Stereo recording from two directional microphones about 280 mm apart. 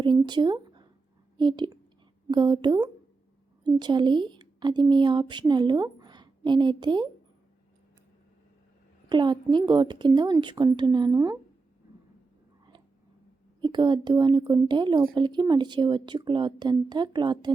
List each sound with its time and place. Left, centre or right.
0.0 s a sound: centre
1.4 s a woman's voice: centre
9.0 s speech: centre
13.6 s speech: centre